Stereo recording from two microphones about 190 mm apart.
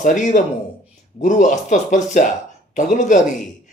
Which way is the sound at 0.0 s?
40° left (ahead or behind).